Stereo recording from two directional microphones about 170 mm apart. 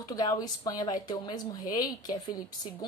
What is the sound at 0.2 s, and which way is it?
A woman's voice, 25° left (ahead or behind).